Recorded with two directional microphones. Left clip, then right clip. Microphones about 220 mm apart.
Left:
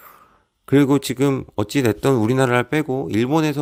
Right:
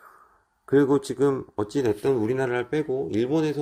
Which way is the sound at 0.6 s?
45° left (ahead or behind).